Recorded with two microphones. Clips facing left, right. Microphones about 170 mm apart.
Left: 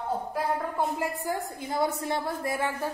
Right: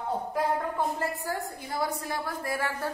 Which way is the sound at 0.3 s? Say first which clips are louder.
Right 1 dB; 5° left (ahead or behind).